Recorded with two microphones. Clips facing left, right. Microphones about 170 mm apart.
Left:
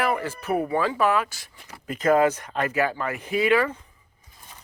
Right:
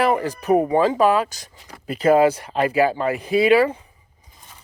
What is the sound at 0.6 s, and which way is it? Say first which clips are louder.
Speech: right 5 dB; 20° right (ahead or behind).